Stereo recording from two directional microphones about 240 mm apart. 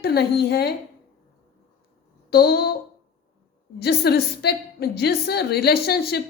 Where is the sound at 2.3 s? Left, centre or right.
Left.